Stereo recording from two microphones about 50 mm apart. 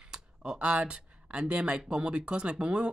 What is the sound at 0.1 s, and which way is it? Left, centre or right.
Speech, centre.